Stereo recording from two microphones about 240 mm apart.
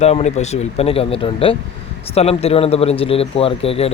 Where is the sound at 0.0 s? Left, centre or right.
Left.